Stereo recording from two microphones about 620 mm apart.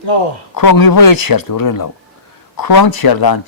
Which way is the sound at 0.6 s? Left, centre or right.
Left.